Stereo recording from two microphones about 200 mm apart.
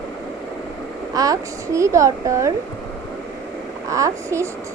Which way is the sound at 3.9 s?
15° right (ahead or behind).